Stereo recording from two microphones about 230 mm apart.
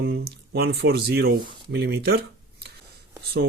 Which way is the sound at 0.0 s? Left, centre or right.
Right.